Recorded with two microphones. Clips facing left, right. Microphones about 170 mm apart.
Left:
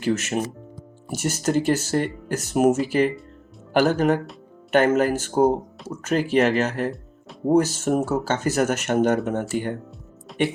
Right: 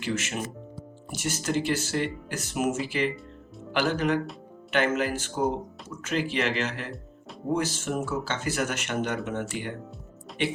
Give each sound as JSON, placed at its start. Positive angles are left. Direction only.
{"t": 0.0, "sound": "speech", "side_deg": 40}